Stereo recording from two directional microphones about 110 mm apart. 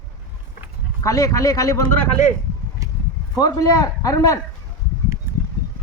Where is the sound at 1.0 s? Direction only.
30° left (ahead or behind).